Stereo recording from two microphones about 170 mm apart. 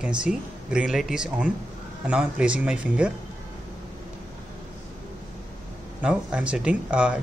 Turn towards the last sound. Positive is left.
turn(degrees=-5)  # may be behind; listen again after turning